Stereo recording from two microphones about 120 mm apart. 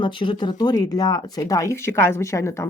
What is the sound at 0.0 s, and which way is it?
Speech, 45° left (ahead or behind).